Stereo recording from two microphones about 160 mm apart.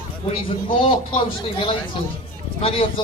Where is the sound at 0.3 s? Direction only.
35° left (ahead or behind).